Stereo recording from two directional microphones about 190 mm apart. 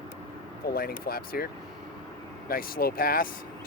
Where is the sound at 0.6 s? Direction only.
50° left (ahead or behind).